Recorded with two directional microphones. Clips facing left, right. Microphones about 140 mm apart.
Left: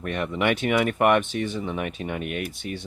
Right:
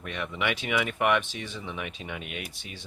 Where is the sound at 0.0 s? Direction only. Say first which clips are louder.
Left 7 dB; 50° left (ahead or behind).